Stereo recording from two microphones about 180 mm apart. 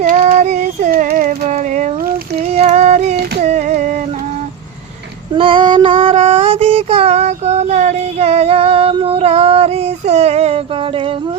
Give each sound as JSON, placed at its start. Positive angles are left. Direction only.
{"t": 0.0, "sound": "female singing", "side_deg": -45}
{"t": 3.4, "sound": "a sound", "side_deg": -40}
{"t": 5.3, "sound": "child singing", "side_deg": -30}